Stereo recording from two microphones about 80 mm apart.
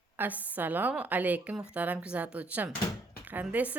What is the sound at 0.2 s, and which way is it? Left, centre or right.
A woman's voice, right.